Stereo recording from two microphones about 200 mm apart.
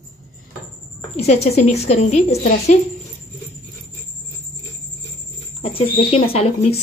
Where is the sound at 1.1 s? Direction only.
30° left (ahead or behind).